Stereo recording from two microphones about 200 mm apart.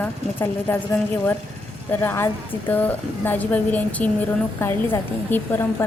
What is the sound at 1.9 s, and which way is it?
Speech, 10° left (ahead or behind).